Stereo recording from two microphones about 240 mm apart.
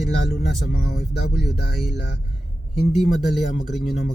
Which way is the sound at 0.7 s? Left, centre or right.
Left.